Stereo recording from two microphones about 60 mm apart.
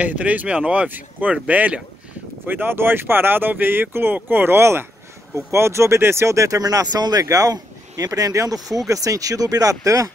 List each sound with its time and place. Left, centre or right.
0.0 s speech: right
8.1 s speech: right
8.8 s speech: right